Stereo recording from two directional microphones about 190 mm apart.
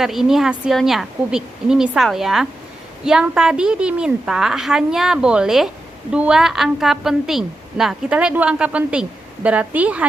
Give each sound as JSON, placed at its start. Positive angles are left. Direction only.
{"t": 0.0, "sound": "a woman's voice", "side_deg": 0}